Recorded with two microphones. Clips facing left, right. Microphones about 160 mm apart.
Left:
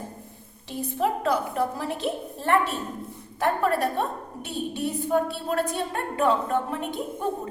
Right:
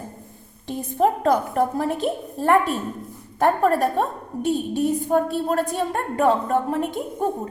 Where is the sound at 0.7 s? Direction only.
45° right (ahead or behind).